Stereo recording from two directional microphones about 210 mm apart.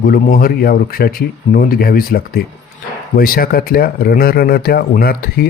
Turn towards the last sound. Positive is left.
turn(degrees=45)  # may be behind; listen again after turning